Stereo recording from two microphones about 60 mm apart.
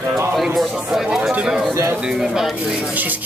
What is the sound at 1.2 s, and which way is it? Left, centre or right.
Speech, centre.